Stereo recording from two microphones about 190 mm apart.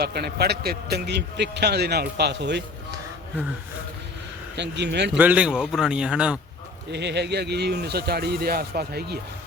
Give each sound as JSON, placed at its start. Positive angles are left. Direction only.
{"t": 0.0, "sound": "a man's voice", "side_deg": -55}
{"t": 4.5, "sound": "a man's voice", "side_deg": -65}
{"t": 5.1, "sound": "a man's voice", "side_deg": -5}
{"t": 6.9, "sound": "a man's voice", "side_deg": -65}